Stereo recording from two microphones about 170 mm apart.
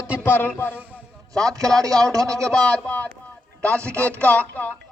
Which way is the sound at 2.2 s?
5° left (ahead or behind).